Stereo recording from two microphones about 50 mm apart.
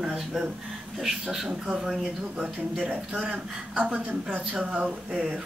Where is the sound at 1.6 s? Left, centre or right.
Centre.